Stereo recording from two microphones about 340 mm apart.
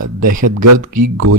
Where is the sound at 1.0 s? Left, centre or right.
Right.